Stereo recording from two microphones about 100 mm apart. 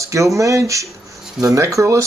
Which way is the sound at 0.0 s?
30° right (ahead or behind).